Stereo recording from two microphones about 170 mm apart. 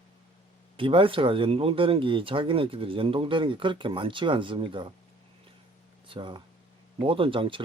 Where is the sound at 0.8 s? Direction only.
30° right (ahead or behind).